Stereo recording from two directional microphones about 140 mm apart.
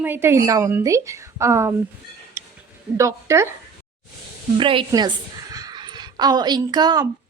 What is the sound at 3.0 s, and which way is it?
Speech, 20° right (ahead or behind).